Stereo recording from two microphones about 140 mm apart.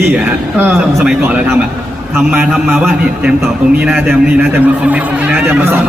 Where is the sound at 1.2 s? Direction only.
15° right (ahead or behind).